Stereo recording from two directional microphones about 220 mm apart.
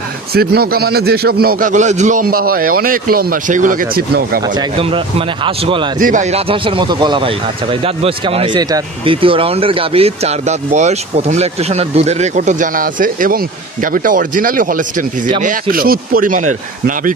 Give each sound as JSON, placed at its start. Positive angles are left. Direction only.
{"t": 0.3, "sound": "a man's voice", "side_deg": -45}
{"t": 4.4, "sound": "speech", "side_deg": -20}
{"t": 5.9, "sound": "a man's voice", "side_deg": -35}